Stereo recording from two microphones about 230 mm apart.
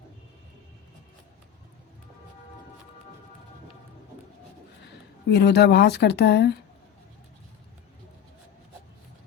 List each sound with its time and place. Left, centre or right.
5.3 s speech: left